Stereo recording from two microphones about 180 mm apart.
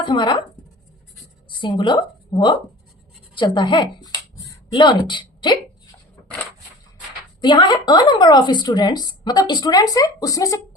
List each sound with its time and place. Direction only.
0.0 s speech: 25° left (ahead or behind)
1.6 s a woman's voice: 25° left (ahead or behind)
7.4 s speech: 25° left (ahead or behind)